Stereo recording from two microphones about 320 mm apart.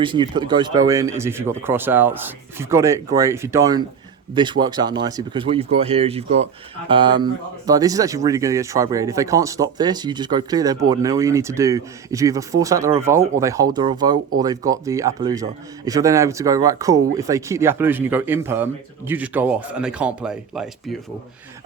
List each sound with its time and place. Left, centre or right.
0.0 s speech: centre